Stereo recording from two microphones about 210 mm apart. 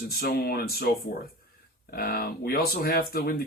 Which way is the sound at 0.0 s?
45° left (ahead or behind).